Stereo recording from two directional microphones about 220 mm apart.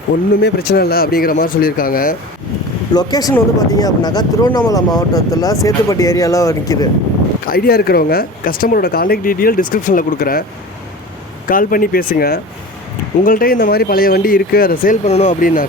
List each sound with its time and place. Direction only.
0.4 s speech: 45° left (ahead or behind)
2.9 s speech: 15° left (ahead or behind)
7.4 s speech: 40° left (ahead or behind)
11.4 s speech: 40° left (ahead or behind)
15.0 s speech: 30° left (ahead or behind)